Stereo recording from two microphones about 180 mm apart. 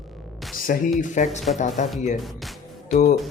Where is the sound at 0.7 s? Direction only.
55° left (ahead or behind).